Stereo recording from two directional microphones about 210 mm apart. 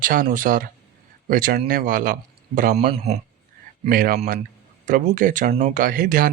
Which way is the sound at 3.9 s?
45° right (ahead or behind).